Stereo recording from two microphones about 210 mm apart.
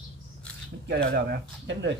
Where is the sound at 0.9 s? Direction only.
55° right (ahead or behind).